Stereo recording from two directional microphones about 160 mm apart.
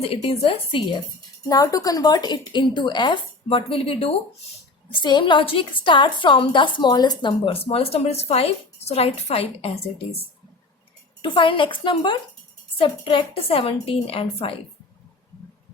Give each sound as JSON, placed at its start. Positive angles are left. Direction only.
{"t": 0.0, "sound": "a woman's voice", "side_deg": 35}
{"t": 1.5, "sound": "a woman's voice", "side_deg": 20}
{"t": 11.2, "sound": "a woman's voice", "side_deg": 30}